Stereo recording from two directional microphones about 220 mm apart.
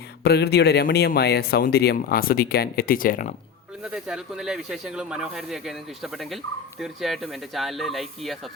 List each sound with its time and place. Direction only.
0.3 s speech: 45° left (ahead or behind)
3.9 s speech: centre (ahead or behind)